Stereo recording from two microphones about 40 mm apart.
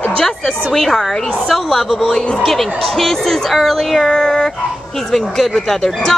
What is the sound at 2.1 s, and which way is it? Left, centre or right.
Speech, centre.